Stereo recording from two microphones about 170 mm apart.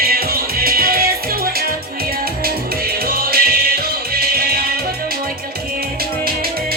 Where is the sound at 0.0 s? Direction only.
60° right (ahead or behind).